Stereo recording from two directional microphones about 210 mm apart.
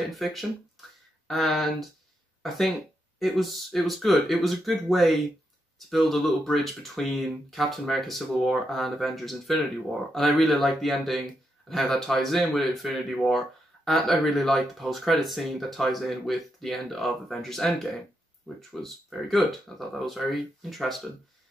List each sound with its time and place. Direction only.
0.1 s speech: centre (ahead or behind)